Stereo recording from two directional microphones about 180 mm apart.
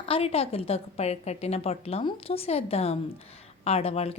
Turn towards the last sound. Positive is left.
turn(degrees=35)  # may be behind; listen again after turning